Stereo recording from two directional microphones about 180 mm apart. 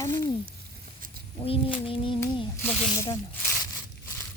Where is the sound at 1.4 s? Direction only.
30° left (ahead or behind).